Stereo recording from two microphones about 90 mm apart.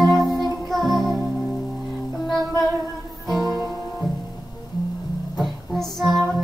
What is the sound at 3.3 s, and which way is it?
Music, 45° left (ahead or behind).